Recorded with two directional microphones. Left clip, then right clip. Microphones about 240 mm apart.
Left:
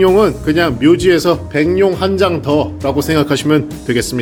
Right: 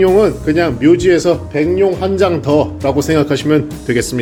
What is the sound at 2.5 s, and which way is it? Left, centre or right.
Speech, centre.